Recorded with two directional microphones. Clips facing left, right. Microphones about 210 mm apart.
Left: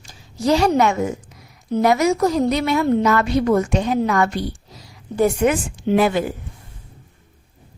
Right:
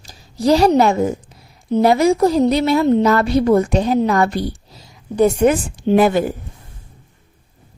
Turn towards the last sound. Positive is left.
turn(degrees=-45)  # may be behind; listen again after turning